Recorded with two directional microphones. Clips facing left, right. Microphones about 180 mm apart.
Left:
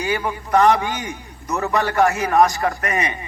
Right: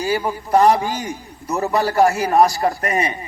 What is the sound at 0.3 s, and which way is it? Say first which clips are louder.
A man's voice: right 1 dB; 35° right (ahead or behind).